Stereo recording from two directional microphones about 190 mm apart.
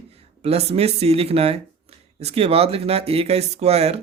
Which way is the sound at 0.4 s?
30° right (ahead or behind).